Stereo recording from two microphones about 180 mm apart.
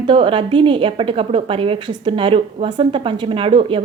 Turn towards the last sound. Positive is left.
turn(degrees=-30)  # may be behind; listen again after turning